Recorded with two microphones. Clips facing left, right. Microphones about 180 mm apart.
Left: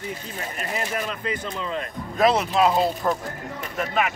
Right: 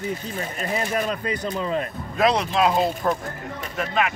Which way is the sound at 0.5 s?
35° right (ahead or behind).